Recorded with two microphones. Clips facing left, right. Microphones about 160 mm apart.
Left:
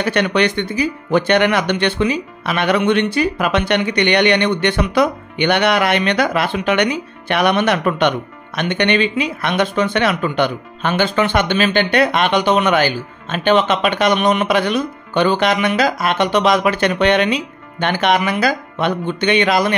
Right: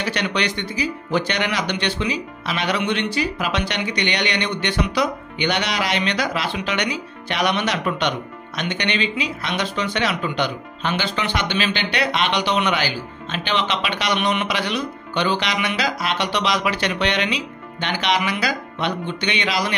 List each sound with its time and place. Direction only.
0.0 s speech: 55° left (ahead or behind)